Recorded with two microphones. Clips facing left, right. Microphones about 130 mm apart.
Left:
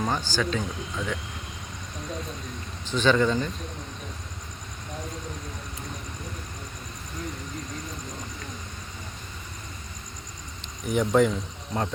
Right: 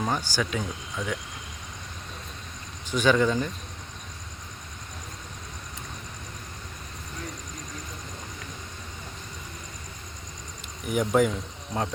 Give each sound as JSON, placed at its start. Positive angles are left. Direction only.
{"t": 0.0, "sound": "speech", "side_deg": -10}
{"t": 2.8, "sound": "speech", "side_deg": -10}
{"t": 10.8, "sound": "speech", "side_deg": -5}